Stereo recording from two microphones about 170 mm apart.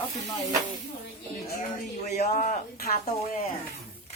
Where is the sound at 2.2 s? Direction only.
45° left (ahead or behind).